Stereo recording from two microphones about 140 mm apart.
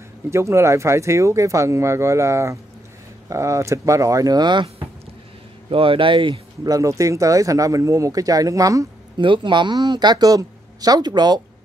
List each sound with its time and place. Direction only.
0.3 s speech: 20° right (ahead or behind)
9.2 s speech: 35° right (ahead or behind)